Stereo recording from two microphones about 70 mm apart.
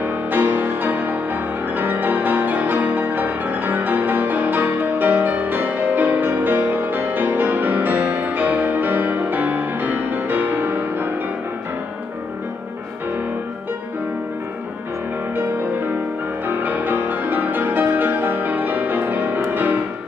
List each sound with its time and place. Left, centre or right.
0.0 s music: right
16.4 s music: right